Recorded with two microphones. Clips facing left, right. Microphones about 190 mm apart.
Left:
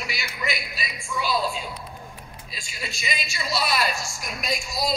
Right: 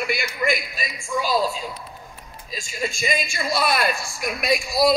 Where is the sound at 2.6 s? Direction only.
45° right (ahead or behind).